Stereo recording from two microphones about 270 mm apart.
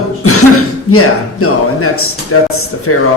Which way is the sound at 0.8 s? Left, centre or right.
Left.